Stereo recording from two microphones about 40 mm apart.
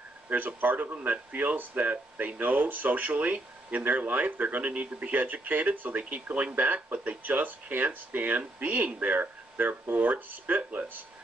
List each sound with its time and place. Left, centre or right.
0.3 s speech: right
0.9 s speech: right
1.3 s speech: right